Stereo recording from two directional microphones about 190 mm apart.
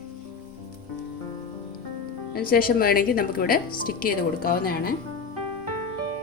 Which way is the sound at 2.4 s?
50° left (ahead or behind).